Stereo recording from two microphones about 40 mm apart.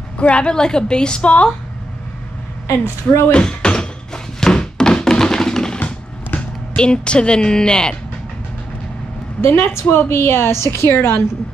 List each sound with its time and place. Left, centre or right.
0.2 s a woman's voice: left
3.3 s a sound: left
5.1 s tap: centre
5.8 s a sound: left
9.4 s a woman's voice: left
10.9 s a woman's voice: left